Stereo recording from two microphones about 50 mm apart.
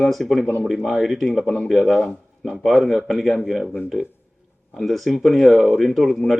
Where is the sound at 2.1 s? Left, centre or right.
Centre.